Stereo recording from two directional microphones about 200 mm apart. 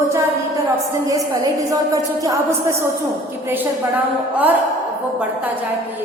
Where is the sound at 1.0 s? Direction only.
15° right (ahead or behind).